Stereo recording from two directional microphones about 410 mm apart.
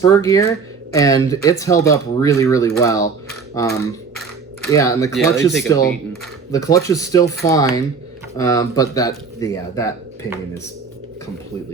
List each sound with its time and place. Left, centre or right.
0.0 s speech: centre